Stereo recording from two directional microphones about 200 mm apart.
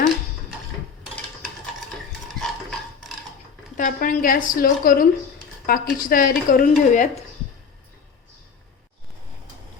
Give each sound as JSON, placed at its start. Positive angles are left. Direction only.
{"t": 2.2, "sound": "stir", "side_deg": 0}
{"t": 3.8, "sound": "speech", "side_deg": 40}